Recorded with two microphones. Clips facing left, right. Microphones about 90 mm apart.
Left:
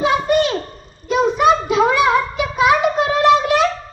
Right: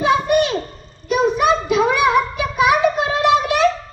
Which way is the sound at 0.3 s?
25° left (ahead or behind).